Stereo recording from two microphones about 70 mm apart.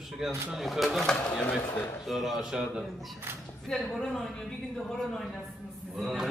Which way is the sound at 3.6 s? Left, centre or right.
Centre.